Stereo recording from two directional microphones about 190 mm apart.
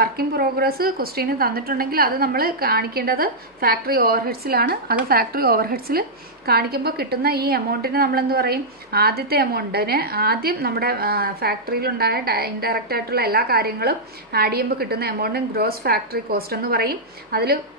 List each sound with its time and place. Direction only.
0.0 s a woman's voice: 50° right (ahead or behind)